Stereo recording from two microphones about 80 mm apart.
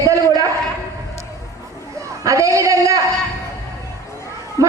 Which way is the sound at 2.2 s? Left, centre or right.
Right.